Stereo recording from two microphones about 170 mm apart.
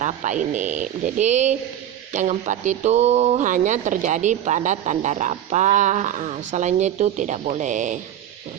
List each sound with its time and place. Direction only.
0.0 s speech: 45° right (ahead or behind)